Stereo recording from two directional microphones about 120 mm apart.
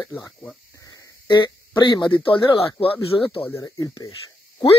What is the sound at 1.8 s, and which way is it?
Speech, 40° left (ahead or behind).